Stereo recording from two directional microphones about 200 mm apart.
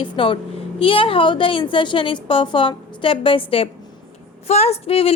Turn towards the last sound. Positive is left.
turn(degrees=30)  # may be behind; listen again after turning